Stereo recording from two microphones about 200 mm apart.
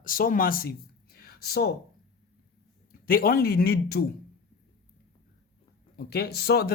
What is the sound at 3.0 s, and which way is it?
Speech, 45° left (ahead or behind).